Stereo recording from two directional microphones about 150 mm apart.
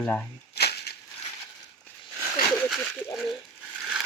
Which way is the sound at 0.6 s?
90° left.